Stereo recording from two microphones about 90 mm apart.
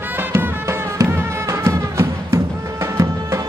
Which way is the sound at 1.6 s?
30° right (ahead or behind).